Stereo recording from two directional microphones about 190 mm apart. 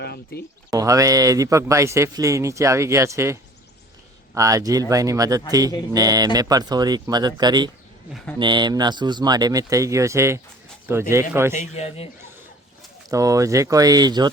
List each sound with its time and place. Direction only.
0.0 s speech: 60° left (ahead or behind)
0.7 s speech: 15° right (ahead or behind)
4.4 s speech: 15° right (ahead or behind)
11.5 s a man's voice: 35° left (ahead or behind)
13.1 s speech: 15° right (ahead or behind)